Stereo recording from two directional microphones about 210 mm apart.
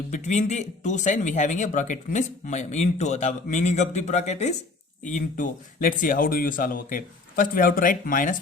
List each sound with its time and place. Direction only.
0.1 s speech: 35° left (ahead or behind)